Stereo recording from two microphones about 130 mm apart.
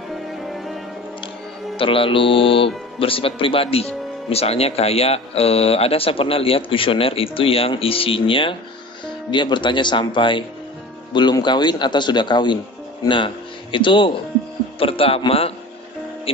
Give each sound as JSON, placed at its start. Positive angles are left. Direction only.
{"t": 0.5, "sound": "music", "side_deg": 0}
{"t": 1.8, "sound": "speech", "side_deg": 45}